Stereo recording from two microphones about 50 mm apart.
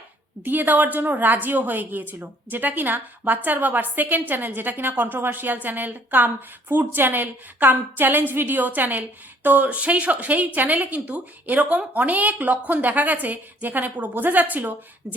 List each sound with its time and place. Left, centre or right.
0.4 s a woman's voice: right